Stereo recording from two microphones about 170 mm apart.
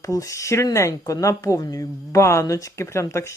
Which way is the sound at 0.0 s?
20° left (ahead or behind).